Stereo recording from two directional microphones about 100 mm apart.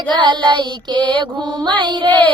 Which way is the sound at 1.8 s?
55° right (ahead or behind).